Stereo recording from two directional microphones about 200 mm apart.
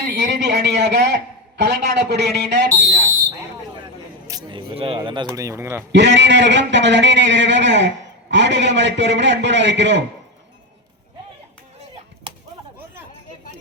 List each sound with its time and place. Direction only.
0.1 s a man's voice: 55° right (ahead or behind)
4.3 s speech: 20° right (ahead or behind)
5.9 s a man's voice: 60° right (ahead or behind)